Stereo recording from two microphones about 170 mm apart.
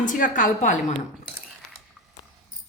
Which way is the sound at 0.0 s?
50° left (ahead or behind).